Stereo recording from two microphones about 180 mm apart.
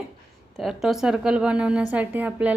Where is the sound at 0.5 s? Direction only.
Centre (ahead or behind).